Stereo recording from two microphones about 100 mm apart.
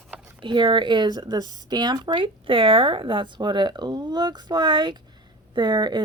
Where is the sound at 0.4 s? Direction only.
55° right (ahead or behind).